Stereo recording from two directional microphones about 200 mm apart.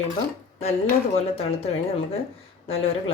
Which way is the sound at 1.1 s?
30° left (ahead or behind).